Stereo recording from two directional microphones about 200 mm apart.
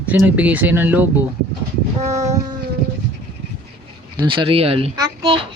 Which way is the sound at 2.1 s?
15° right (ahead or behind).